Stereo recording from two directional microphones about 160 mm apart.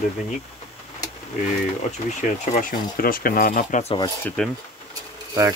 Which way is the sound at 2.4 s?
55° left (ahead or behind).